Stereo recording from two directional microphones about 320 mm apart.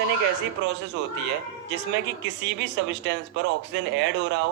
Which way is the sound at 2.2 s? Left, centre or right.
Right.